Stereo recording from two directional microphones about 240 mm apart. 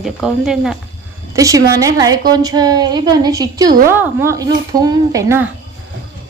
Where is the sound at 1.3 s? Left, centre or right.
Centre.